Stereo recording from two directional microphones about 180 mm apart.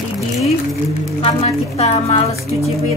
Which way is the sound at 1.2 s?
35° left (ahead or behind).